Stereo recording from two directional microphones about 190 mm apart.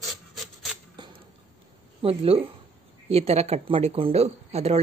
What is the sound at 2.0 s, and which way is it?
Speech, 30° right (ahead or behind).